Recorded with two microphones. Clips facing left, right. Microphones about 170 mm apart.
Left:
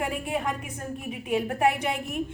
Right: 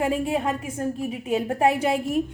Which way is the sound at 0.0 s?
30° right (ahead or behind).